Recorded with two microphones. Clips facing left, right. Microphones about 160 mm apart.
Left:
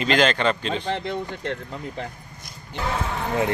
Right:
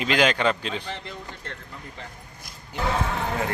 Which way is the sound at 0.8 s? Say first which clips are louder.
Left 9 dB; 65° left (ahead or behind).